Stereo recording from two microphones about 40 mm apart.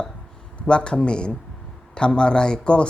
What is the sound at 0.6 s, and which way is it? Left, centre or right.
Speech, left.